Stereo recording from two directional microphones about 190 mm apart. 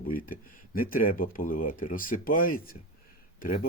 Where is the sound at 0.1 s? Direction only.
50° left (ahead or behind).